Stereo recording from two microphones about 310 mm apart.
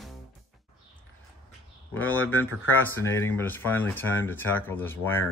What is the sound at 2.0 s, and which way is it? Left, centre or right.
Speech, left.